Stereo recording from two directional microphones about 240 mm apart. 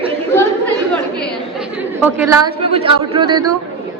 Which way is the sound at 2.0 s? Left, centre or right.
Centre.